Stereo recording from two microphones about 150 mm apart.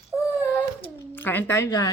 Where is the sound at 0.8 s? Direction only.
15° left (ahead or behind).